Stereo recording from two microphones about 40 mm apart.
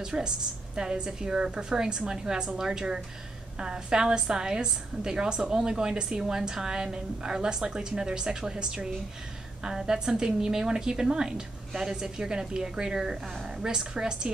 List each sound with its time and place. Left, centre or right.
0.0 s a woman's voice: centre